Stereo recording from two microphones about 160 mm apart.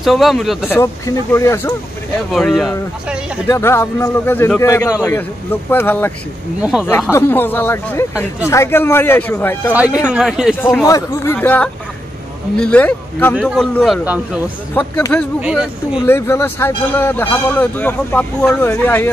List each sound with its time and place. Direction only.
0.0 s speech: centre (ahead or behind)
0.7 s speech: 15° left (ahead or behind)
2.3 s speech: centre (ahead or behind)
3.4 s speech: 15° left (ahead or behind)
6.6 s speech: 5° right (ahead or behind)
6.9 s speech: 15° left (ahead or behind)
10.0 s speech: 5° right (ahead or behind)
10.5 s speech: 10° left (ahead or behind)
14.0 s speech: 10° right (ahead or behind)
14.7 s speech: 10° left (ahead or behind)
15.4 s speech: 5° right (ahead or behind)
16.1 s speech: 15° left (ahead or behind)